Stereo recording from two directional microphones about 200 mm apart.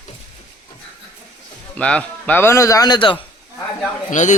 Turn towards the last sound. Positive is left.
turn(degrees=35)  # may be behind; listen again after turning